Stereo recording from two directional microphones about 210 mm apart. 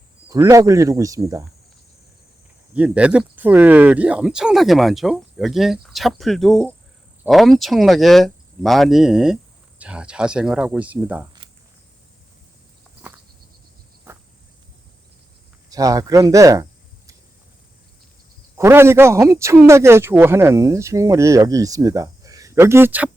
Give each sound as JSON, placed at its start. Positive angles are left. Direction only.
{"t": 0.3, "sound": "speech", "side_deg": -15}
{"t": 2.7, "sound": "speech", "side_deg": -5}
{"t": 15.7, "sound": "speech", "side_deg": -15}
{"t": 18.5, "sound": "speech", "side_deg": -10}